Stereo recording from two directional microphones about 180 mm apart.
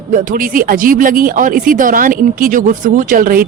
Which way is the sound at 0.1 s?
50° right (ahead or behind).